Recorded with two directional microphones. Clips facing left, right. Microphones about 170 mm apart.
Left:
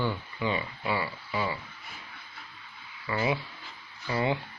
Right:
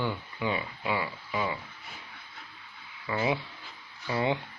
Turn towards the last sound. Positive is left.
turn(degrees=-20)  # may be behind; listen again after turning